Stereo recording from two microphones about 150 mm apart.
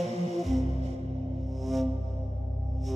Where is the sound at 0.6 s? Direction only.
45° right (ahead or behind).